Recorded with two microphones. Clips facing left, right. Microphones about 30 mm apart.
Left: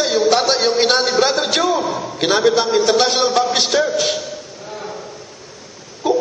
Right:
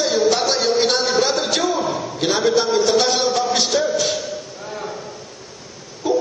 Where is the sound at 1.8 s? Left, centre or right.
Centre.